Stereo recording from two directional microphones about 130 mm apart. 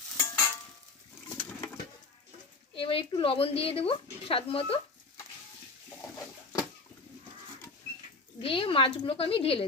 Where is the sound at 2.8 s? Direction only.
45° left (ahead or behind).